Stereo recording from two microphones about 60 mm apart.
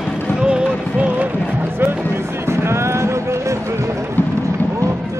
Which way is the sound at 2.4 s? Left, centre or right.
Right.